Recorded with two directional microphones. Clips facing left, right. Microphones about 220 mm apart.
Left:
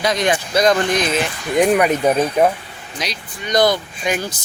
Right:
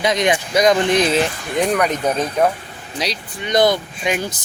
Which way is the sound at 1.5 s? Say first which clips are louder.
Left 4 dB; 10° left (ahead or behind).